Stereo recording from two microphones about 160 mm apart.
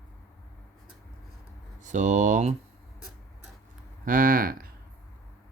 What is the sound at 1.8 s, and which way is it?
Speech, 50° right (ahead or behind).